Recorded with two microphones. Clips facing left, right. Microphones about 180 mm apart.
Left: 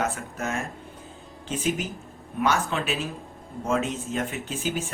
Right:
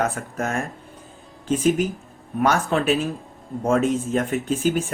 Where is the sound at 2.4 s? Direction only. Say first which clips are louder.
Right 5 dB; 40° right (ahead or behind).